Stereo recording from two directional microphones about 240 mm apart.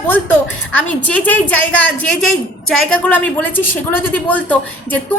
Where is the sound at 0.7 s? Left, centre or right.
Centre.